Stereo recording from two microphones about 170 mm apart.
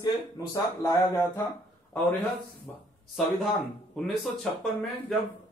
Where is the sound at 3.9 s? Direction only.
Centre (ahead or behind).